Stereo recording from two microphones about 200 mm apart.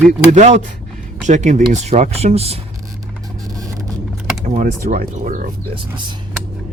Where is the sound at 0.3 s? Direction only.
35° right (ahead or behind).